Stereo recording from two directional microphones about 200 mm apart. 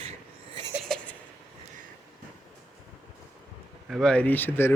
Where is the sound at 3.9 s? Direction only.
5° left (ahead or behind).